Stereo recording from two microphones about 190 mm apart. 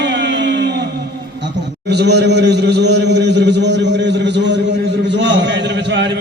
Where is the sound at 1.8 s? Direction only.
60° right (ahead or behind).